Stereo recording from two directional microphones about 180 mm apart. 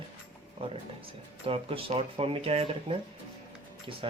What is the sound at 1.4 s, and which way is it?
Speech, 30° right (ahead or behind).